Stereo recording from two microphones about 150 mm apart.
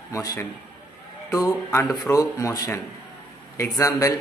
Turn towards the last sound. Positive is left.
turn(degrees=20)  # may be behind; listen again after turning